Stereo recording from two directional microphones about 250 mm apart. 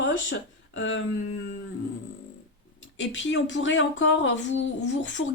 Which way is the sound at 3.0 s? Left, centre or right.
Left.